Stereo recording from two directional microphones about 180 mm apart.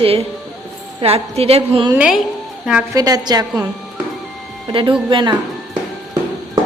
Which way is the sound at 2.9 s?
20° right (ahead or behind).